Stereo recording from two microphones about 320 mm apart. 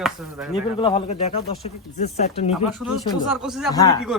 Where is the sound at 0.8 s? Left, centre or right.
Centre.